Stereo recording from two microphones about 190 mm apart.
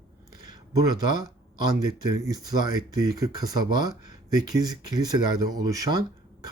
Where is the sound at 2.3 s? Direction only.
20° right (ahead or behind).